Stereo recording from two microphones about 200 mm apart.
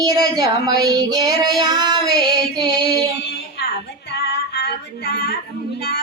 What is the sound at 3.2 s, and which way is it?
Female singing, 55° left (ahead or behind).